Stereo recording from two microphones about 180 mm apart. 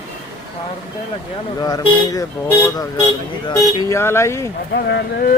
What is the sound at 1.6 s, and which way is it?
Speech, 20° left (ahead or behind).